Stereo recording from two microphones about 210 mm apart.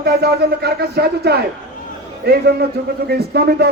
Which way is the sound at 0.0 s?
50° right (ahead or behind).